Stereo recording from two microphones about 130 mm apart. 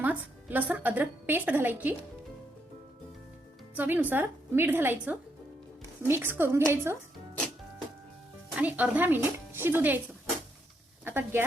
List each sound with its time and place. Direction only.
0.0 s a woman's voice: 15° right (ahead or behind)
3.8 s a woman's voice: 15° right (ahead or behind)
8.5 s a woman's voice: 10° right (ahead or behind)
11.0 s speech: 15° right (ahead or behind)